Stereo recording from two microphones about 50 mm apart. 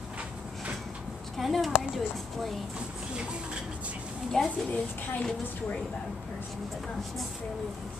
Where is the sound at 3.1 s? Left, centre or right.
Centre.